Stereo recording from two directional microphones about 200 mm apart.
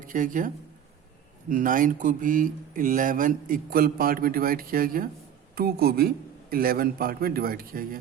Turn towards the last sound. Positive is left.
turn(degrees=-45)  # may be behind; listen again after turning